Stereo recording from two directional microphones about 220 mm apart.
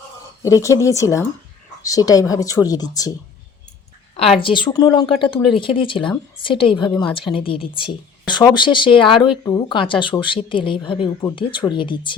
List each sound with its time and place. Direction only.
0.4 s speech: 15° left (ahead or behind)
4.4 s speech: 20° left (ahead or behind)